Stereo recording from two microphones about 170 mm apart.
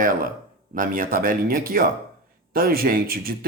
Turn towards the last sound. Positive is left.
turn(degrees=-60)  # may be behind; listen again after turning